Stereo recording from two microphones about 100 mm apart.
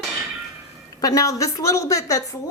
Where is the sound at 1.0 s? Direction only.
35° left (ahead or behind).